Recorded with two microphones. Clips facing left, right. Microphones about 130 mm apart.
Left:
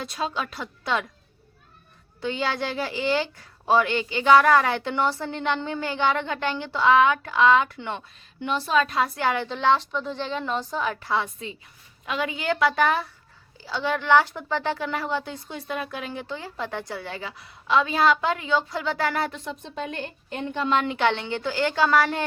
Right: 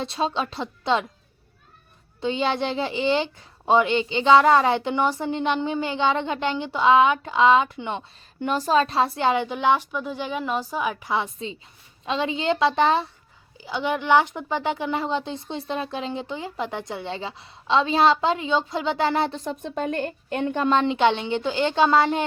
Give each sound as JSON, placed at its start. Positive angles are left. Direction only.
{"t": 0.0, "sound": "a woman's voice", "side_deg": -25}
{"t": 2.2, "sound": "a woman's voice", "side_deg": -20}
{"t": 8.4, "sound": "a woman's voice", "side_deg": -45}
{"t": 19.4, "sound": "a woman's voice", "side_deg": -45}
{"t": 20.7, "sound": "a woman's voice", "side_deg": -25}